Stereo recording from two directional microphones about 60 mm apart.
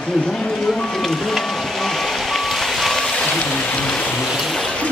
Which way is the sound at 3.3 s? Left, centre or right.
Centre.